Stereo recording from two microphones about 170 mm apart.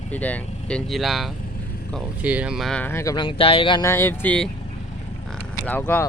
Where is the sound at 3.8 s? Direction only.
15° left (ahead or behind).